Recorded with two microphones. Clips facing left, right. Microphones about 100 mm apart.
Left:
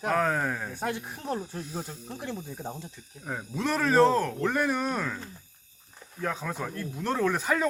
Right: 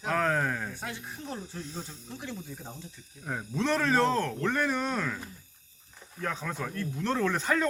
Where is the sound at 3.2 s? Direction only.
5° left (ahead or behind).